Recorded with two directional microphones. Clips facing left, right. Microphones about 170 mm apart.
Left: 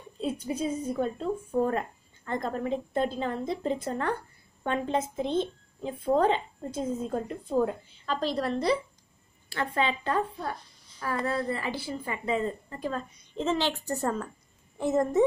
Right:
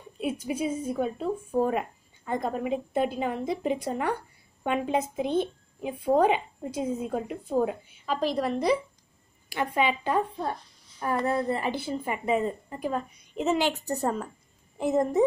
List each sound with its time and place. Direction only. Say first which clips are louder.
0.2 s a woman's voice: right 1 dB; 10° right (ahead or behind)